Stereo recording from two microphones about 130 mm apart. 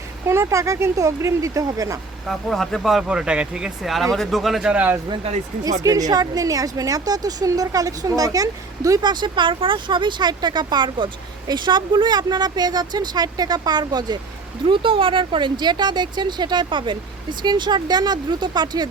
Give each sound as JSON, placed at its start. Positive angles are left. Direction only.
{"t": 0.3, "sound": "speech", "side_deg": -20}
{"t": 2.2, "sound": "speech", "side_deg": 0}
{"t": 5.8, "sound": "a woman's voice", "side_deg": -30}